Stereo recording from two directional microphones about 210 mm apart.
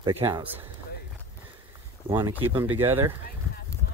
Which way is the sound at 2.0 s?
20° right (ahead or behind).